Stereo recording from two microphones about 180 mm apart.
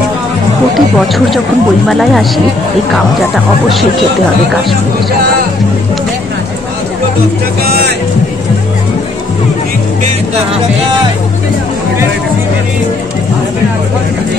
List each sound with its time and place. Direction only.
0.7 s speech: centre (ahead or behind)
7.6 s music: 60° right (ahead or behind)